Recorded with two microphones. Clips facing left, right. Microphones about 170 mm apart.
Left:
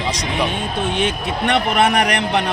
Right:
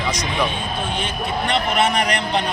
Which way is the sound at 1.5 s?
60° left (ahead or behind).